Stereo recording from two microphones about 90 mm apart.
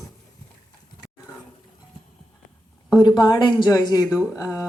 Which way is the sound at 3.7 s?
40° left (ahead or behind).